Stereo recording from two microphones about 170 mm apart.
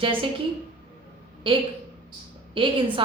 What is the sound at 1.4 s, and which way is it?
Speech, 30° right (ahead or behind).